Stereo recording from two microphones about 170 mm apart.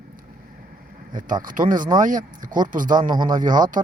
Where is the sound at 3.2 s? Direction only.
25° right (ahead or behind).